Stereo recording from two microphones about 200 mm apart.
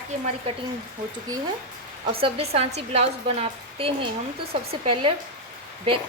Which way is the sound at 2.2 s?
30° right (ahead or behind).